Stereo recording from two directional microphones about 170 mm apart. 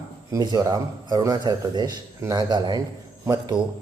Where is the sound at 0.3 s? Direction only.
20° right (ahead or behind).